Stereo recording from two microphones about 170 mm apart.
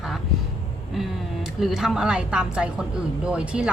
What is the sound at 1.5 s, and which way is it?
A woman's voice, 5° right (ahead or behind).